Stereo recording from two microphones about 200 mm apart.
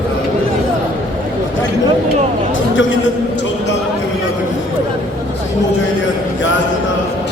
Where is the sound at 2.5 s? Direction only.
70° left (ahead or behind).